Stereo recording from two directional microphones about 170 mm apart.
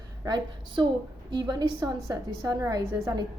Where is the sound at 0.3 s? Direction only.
25° right (ahead or behind).